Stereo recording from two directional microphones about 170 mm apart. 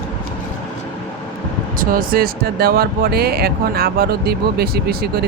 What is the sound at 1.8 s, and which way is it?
Speech, 55° right (ahead or behind).